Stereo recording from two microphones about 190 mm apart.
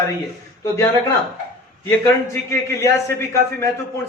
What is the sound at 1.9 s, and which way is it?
A man's voice, 15° left (ahead or behind).